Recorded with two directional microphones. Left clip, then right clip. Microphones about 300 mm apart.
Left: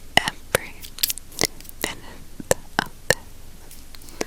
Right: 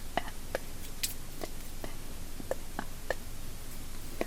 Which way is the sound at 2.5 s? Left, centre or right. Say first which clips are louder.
Left 16 dB; left.